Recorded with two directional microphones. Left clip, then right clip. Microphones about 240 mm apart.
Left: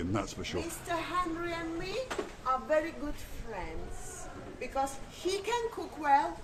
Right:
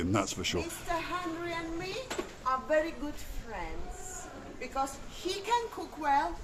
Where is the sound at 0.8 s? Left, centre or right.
Centre.